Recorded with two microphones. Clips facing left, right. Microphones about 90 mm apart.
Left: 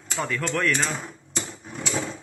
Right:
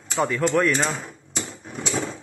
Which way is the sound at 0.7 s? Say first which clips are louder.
Right 3 dB; 30° right (ahead or behind).